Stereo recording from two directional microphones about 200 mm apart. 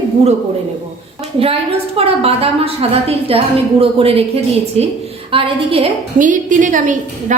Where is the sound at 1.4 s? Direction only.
30° right (ahead or behind).